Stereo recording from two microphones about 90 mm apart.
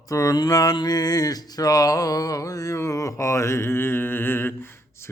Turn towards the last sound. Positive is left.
turn(degrees=25)  # may be behind; listen again after turning